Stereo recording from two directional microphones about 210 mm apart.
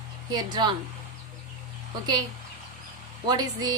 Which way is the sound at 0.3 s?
20° right (ahead or behind).